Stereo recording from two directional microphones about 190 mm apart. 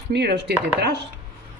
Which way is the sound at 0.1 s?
60° right (ahead or behind).